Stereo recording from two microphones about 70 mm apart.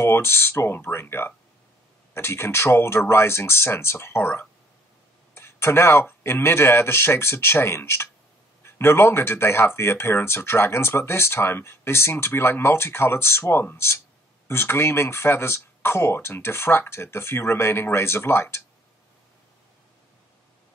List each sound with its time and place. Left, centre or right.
0.0 s speech: left